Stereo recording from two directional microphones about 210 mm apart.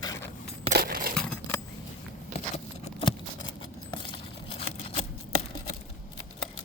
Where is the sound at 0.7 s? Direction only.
45° right (ahead or behind).